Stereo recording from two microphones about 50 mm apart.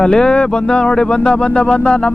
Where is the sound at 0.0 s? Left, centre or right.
Centre.